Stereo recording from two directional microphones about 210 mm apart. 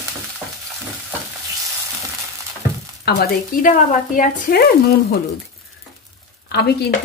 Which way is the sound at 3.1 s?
45° left (ahead or behind).